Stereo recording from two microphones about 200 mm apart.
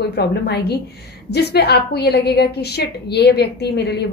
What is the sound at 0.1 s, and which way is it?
A woman's voice, 55° left (ahead or behind).